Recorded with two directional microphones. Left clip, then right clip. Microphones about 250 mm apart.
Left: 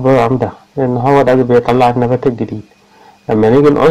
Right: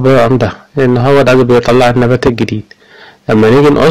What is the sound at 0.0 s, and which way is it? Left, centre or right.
A man's voice, right.